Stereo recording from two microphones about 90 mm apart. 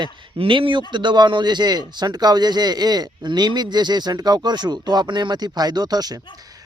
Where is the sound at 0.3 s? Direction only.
75° right (ahead or behind).